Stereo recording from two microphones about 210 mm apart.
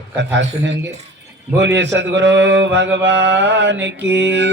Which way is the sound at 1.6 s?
55° right (ahead or behind).